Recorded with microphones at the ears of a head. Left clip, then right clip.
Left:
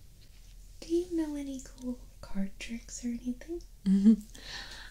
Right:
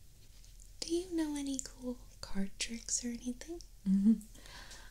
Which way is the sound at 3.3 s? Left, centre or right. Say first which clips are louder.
Left 6 dB; left.